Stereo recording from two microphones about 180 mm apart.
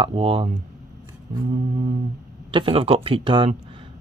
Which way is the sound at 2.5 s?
30° right (ahead or behind).